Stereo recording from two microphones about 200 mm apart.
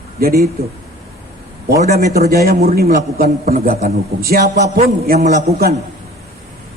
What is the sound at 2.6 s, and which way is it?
A man's voice, 50° right (ahead or behind).